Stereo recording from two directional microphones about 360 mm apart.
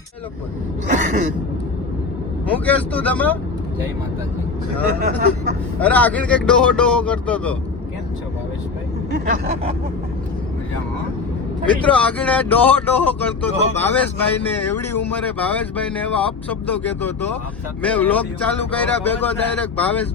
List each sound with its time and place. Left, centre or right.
0.9 s speech: centre
2.6 s speech: centre
4.9 s speech: right
5.8 s speech: centre
9.1 s speech: right
11.6 s speech: centre